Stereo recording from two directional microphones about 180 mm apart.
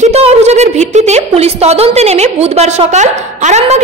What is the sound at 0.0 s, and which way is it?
A woman's voice, 35° right (ahead or behind).